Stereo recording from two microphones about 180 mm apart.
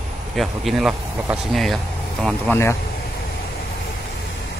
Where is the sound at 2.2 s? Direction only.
15° left (ahead or behind).